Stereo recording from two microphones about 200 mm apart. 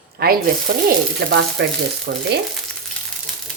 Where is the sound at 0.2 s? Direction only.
50° right (ahead or behind).